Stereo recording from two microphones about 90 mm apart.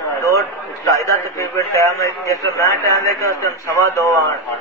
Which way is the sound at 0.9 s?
35° left (ahead or behind).